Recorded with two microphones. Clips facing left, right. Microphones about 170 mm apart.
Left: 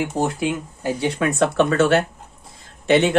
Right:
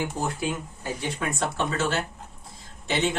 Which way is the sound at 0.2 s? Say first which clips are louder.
Left 7 dB; 85° left.